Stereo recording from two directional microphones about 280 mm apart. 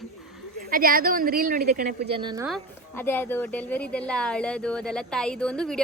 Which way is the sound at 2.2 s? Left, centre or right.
Centre.